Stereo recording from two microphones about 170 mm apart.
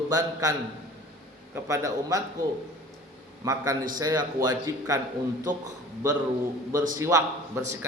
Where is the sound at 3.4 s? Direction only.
20° right (ahead or behind).